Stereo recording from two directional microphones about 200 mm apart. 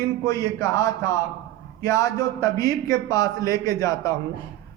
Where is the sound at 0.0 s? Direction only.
15° left (ahead or behind).